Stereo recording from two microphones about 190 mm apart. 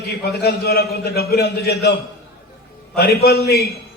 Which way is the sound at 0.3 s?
55° left (ahead or behind).